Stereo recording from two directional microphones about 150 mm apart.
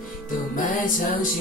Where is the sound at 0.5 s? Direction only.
65° left (ahead or behind).